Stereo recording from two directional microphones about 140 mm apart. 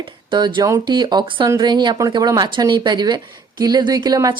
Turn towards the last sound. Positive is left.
turn(degrees=-25)  # may be behind; listen again after turning